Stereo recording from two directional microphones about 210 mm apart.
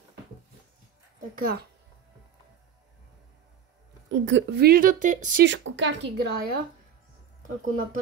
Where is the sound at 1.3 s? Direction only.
45° right (ahead or behind).